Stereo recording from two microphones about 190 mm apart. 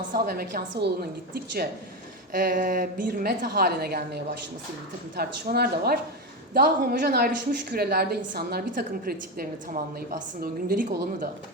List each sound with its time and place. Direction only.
0.1 s a woman's voice: 50° right (ahead or behind)
2.3 s a woman's voice: 50° right (ahead or behind)